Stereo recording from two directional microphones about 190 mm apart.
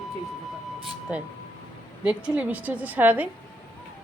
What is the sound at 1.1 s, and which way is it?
Speech, 5° right (ahead or behind).